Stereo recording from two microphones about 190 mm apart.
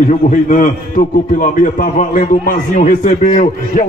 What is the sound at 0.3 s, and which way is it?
A man's voice, 40° left (ahead or behind).